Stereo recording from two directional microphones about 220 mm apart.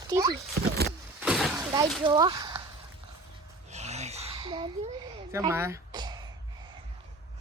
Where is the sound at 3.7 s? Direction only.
30° right (ahead or behind).